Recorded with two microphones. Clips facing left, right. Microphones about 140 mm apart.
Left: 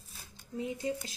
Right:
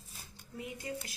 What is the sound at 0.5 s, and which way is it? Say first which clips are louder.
Speech: left 6 dB; 25° left (ahead or behind).